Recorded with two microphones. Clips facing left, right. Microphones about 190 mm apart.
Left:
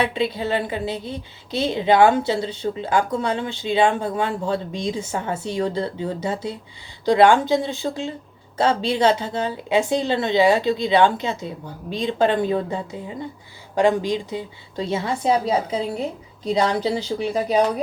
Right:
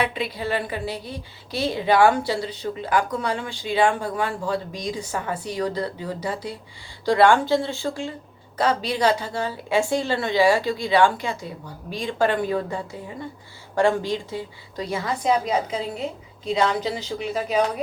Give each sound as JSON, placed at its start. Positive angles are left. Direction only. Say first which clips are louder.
{"t": 0.0, "sound": "a woman's voice", "louder": "left 3 dB", "side_deg": 25}